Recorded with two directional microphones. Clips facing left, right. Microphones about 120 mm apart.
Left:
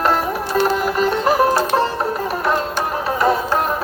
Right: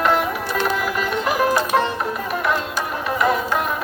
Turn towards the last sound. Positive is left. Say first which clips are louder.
# left 3 dB
turn(degrees=35)  # may be behind; listen again after turning